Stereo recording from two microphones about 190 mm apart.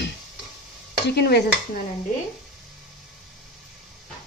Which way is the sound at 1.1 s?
60° left (ahead or behind).